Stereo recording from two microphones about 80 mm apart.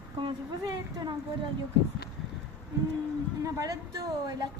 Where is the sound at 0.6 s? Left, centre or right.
Right.